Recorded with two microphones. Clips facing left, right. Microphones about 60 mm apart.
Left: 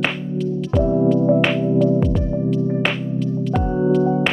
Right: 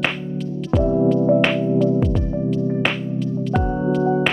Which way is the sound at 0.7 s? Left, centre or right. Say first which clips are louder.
Even; centre.